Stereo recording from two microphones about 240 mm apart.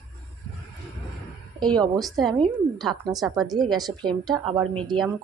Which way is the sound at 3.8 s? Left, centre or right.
Centre.